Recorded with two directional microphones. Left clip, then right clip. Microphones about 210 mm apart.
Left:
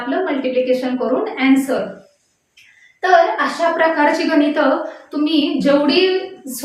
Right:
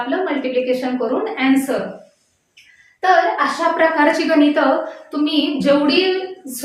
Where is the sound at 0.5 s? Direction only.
10° right (ahead or behind).